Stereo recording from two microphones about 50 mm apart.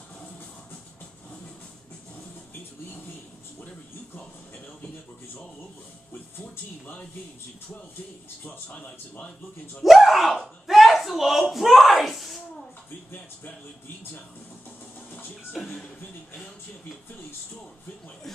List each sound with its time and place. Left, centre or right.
8.6 s a man's voice: left
9.8 s speech: centre